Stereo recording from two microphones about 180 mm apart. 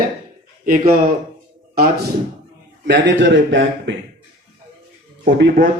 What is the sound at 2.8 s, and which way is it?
Speech, 75° right (ahead or behind).